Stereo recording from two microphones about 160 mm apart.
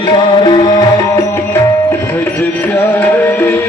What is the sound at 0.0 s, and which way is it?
Music, 30° left (ahead or behind).